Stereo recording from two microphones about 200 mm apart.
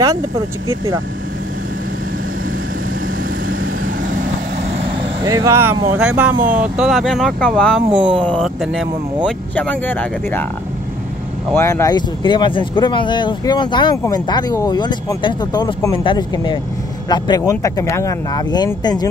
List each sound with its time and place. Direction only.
5.2 s speech: 15° right (ahead or behind); by 7.8 s 5° left (ahead or behind)
8.0 s speech: 25° right (ahead or behind)
8.3 s speech: centre (ahead or behind)
11.5 s speech: 15° left (ahead or behind)